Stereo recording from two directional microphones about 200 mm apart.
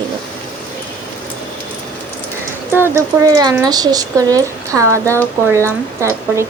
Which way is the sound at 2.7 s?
10° right (ahead or behind).